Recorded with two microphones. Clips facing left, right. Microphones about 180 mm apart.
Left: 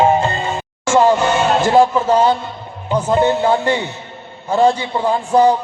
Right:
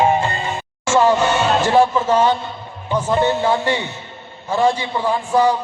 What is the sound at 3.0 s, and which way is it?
Music, 20° left (ahead or behind).